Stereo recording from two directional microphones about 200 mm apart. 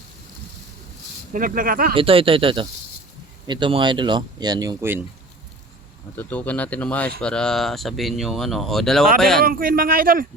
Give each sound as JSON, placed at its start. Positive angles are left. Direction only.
{"t": 1.3, "sound": "speech", "side_deg": -45}
{"t": 1.9, "sound": "speech", "side_deg": -25}
{"t": 6.1, "sound": "speech", "side_deg": 10}
{"t": 9.4, "sound": "speech", "side_deg": -45}